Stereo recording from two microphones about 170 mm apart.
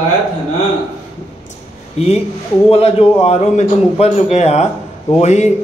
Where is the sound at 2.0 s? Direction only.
35° left (ahead or behind).